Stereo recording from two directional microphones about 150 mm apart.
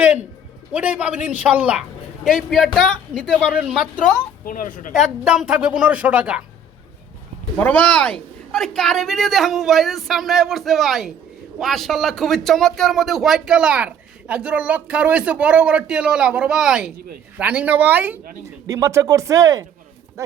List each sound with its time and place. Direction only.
0.7 s a woman's voice: 10° right (ahead or behind)
4.4 s a woman's voice: 65° left (ahead or behind)
4.9 s a woman's voice: 5° right (ahead or behind)
7.6 s a woman's voice: 10° left (ahead or behind); by 20.3 s 20° right (ahead or behind)